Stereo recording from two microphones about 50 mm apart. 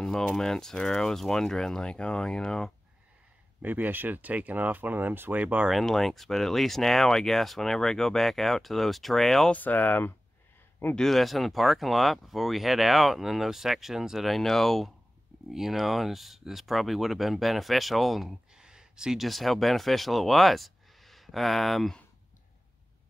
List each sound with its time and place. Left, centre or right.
0.4 s speech: centre
3.6 s speech: right
5.9 s speech: centre
9.5 s speech: left
11.0 s speech: centre
15.5 s speech: centre
18.5 s a sound: centre
19.2 s speech: centre